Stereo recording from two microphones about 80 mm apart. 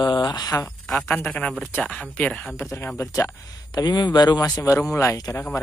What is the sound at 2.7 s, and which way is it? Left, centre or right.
Speech, left.